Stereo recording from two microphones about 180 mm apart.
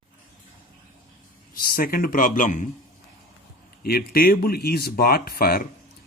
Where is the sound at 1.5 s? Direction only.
55° left (ahead or behind).